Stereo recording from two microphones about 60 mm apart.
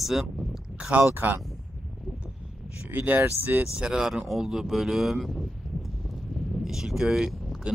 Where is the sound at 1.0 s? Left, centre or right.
Right.